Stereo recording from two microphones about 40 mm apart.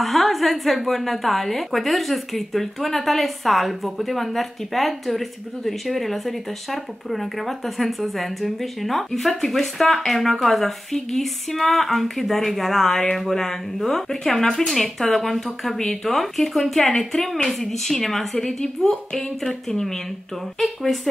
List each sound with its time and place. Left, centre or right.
0.0 s a woman's voice: centre